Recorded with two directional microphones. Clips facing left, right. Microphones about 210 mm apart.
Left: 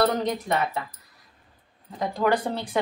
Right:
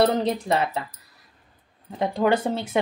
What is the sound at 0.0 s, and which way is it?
Speech, 30° right (ahead or behind).